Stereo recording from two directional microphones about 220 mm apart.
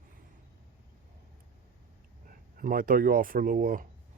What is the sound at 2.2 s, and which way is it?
Speech, 40° right (ahead or behind).